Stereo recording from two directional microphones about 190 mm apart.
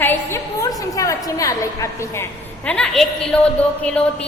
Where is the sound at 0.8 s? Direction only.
15° left (ahead or behind).